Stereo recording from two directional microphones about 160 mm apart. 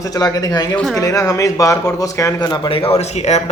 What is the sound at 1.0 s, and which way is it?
Speech, 20° left (ahead or behind).